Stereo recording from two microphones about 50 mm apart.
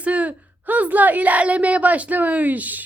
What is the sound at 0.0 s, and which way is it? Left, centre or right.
A woman's voice, right.